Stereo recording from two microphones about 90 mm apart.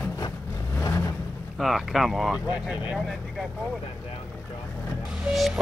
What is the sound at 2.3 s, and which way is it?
Speech, 15° right (ahead or behind).